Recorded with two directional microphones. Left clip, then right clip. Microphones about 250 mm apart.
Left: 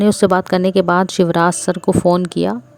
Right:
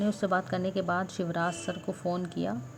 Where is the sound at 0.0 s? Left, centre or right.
Left.